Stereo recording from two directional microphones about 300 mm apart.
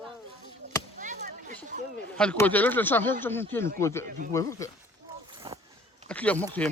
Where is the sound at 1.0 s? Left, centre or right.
Right.